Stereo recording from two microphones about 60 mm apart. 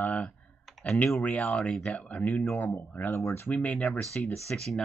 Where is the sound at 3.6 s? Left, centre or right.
Left.